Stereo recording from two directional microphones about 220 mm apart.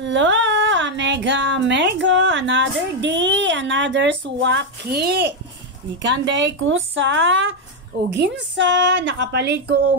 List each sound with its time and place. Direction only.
0.0 s a woman's voice: 55° right (ahead or behind)